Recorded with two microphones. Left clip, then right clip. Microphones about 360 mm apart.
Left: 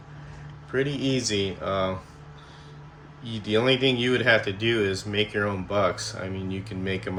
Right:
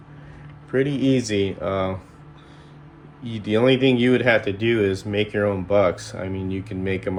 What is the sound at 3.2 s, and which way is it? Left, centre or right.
Speech, centre.